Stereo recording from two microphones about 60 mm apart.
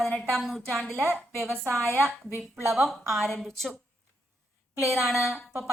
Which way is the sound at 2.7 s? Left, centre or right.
Centre.